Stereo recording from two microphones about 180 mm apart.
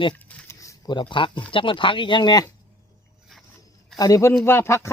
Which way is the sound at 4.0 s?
20° left (ahead or behind).